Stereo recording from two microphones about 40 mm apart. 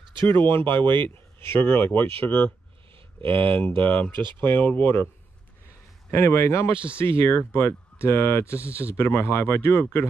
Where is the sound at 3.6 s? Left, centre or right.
Left.